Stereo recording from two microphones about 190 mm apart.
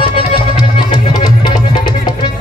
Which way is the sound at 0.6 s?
20° left (ahead or behind).